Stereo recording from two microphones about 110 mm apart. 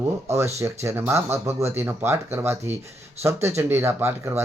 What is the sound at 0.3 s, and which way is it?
Speech, 25° right (ahead or behind).